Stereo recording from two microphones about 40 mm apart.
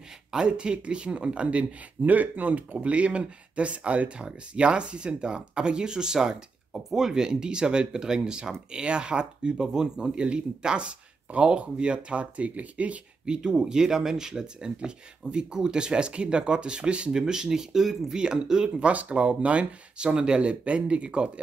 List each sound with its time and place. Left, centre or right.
0.5 s speech: right
6.7 s speech: centre; by 13.0 s right
13.2 s speech: centre
18.2 s speech: centre
18.9 s speech: right